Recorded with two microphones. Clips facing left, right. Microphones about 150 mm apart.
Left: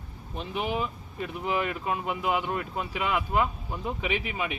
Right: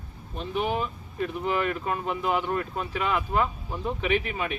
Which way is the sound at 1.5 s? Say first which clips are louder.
Left 1 dB; 10° left (ahead or behind).